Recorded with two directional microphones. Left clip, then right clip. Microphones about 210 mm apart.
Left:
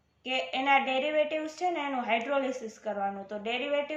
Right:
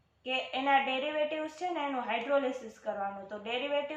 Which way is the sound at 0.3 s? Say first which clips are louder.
Left 3 dB; 50° left (ahead or behind).